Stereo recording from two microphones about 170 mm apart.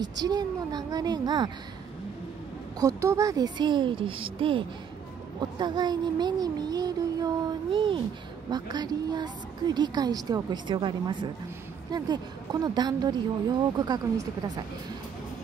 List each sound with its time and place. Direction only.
0.0 s a woman's voice: 25° right (ahead or behind)
2.8 s a woman's voice: 20° right (ahead or behind)